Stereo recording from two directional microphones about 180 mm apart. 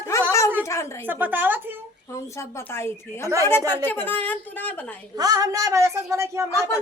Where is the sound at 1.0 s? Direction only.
10° right (ahead or behind).